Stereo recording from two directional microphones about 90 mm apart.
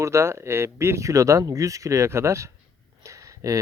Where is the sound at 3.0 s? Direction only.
35° right (ahead or behind).